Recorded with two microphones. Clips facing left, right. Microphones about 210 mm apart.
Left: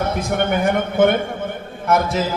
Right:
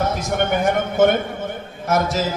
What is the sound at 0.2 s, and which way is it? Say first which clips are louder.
A man's voice: left 1 dB; 55° left (ahead or behind).